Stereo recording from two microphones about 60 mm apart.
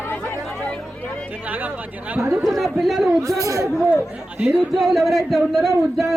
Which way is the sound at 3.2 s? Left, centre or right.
Right.